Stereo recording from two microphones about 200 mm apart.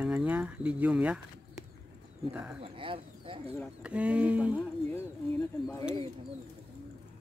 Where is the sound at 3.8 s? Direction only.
5° right (ahead or behind).